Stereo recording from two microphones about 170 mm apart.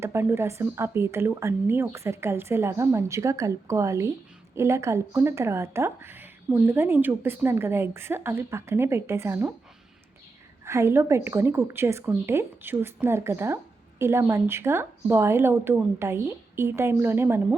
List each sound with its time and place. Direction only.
0.0 s speech: 15° right (ahead or behind)
10.7 s speech: 15° right (ahead or behind)